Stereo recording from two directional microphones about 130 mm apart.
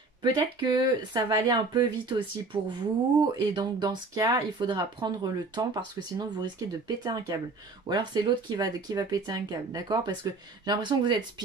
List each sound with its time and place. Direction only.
0.2 s speech: 35° right (ahead or behind)
3.3 s speech: 35° right (ahead or behind)